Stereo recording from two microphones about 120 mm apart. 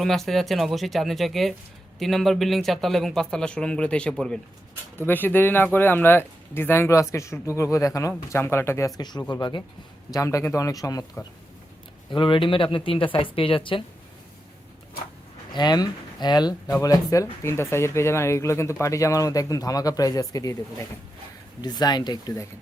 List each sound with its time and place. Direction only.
0.0 s a man's voice: centre (ahead or behind); by 8.9 s 20° left (ahead or behind)
9.0 s speech: 35° left (ahead or behind)
10.1 s speech: 30° left (ahead or behind)
12.1 s speech: 45° left (ahead or behind)
15.5 s speech: 35° left (ahead or behind)
21.6 s speech: 35° left (ahead or behind)